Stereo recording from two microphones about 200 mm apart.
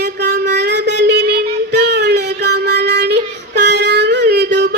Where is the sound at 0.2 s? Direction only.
55° right (ahead or behind).